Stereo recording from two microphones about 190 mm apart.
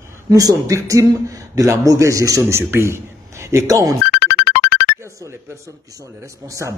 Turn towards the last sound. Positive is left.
turn(degrees=-15)  # may be behind; listen again after turning